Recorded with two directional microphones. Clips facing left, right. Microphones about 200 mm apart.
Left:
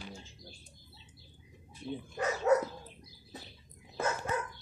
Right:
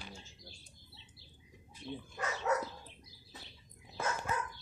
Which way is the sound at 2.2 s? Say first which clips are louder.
Left 7 dB; 35° left (ahead or behind).